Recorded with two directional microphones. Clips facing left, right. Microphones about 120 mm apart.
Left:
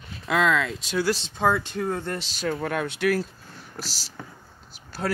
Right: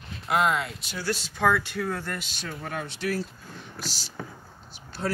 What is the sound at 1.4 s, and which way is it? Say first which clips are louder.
Speech: even; 15° left (ahead or behind).